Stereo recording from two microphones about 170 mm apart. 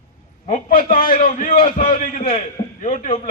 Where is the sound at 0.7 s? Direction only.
55° left (ahead or behind).